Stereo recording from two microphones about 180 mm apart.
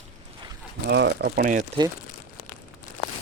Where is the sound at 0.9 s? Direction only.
65° right (ahead or behind); by 1.7 s 50° right (ahead or behind).